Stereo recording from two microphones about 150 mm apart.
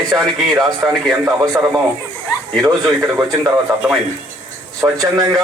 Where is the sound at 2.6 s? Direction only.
25° right (ahead or behind).